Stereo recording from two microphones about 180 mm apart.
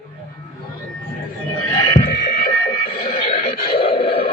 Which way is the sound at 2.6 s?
25° left (ahead or behind).